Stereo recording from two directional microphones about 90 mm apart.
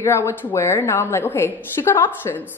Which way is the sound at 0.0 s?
30° left (ahead or behind).